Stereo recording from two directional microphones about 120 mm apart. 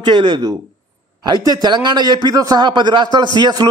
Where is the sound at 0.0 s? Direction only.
40° right (ahead or behind).